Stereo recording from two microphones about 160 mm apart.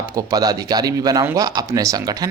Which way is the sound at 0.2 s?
25° right (ahead or behind).